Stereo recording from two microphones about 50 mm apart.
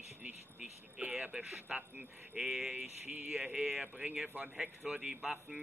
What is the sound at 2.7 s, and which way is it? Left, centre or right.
Speech, right.